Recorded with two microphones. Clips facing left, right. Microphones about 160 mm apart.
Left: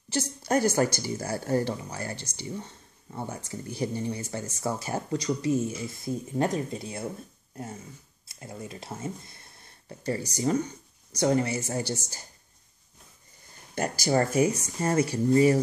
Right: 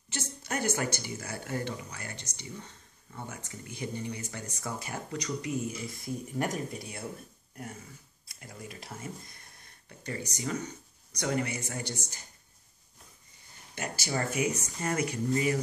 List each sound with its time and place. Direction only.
0.1 s speech: 40° left (ahead or behind)
8.3 s speech: 25° left (ahead or behind)
13.7 s speech: 40° left (ahead or behind)